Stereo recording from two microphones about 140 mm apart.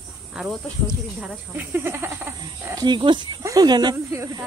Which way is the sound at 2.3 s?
30° right (ahead or behind).